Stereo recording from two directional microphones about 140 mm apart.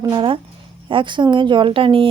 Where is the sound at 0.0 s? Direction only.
35° right (ahead or behind).